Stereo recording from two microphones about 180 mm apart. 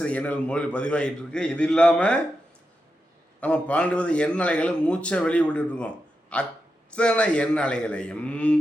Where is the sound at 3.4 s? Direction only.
10° left (ahead or behind).